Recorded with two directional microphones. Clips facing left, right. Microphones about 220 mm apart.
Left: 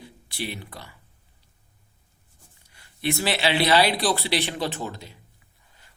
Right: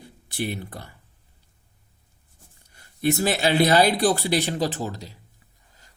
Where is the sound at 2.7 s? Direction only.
45° right (ahead or behind).